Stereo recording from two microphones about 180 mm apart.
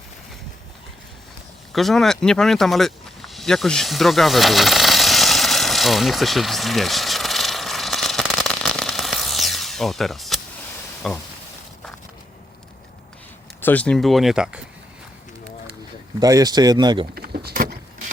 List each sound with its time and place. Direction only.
1.7 s a sound: centre (ahead or behind)
11.0 s speech: centre (ahead or behind)
13.6 s speech: 10° left (ahead or behind)
16.2 s speech: 20° right (ahead or behind)
17.2 s power windows: 55° right (ahead or behind)